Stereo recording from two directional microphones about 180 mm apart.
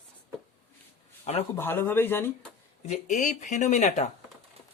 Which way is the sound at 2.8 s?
40° left (ahead or behind).